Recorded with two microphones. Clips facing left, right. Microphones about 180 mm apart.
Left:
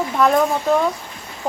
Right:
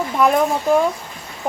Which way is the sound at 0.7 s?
10° right (ahead or behind).